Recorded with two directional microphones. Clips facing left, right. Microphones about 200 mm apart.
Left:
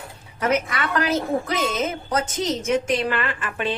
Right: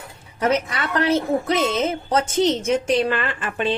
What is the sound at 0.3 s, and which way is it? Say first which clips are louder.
A woman's voice: right 1 dB; 30° right (ahead or behind).